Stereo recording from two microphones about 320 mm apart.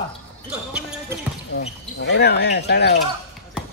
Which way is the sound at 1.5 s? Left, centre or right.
Left.